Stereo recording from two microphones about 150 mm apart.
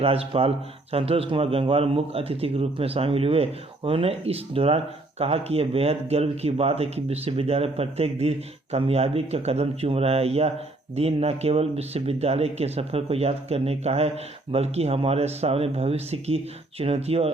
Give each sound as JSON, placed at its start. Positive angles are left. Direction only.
{"t": 0.0, "sound": "speech", "side_deg": -40}